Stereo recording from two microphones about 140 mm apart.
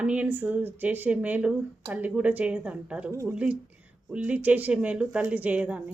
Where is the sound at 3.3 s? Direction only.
10° right (ahead or behind).